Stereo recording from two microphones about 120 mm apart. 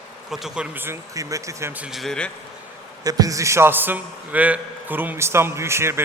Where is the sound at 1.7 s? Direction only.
10° right (ahead or behind).